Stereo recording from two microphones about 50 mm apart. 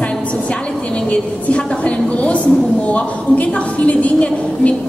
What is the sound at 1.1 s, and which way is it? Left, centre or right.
A woman's voice, left.